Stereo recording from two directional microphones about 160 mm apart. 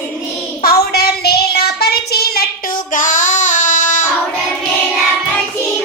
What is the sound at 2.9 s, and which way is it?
Female singing, 55° left (ahead or behind).